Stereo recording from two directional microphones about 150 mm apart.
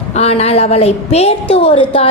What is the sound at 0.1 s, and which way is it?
A woman's voice, 45° left (ahead or behind).